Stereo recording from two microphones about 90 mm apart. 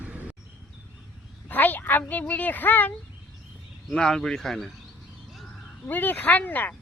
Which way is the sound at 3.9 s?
5° left (ahead or behind).